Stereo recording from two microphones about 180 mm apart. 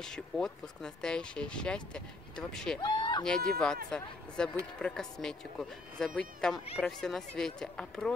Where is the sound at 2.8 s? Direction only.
25° left (ahead or behind).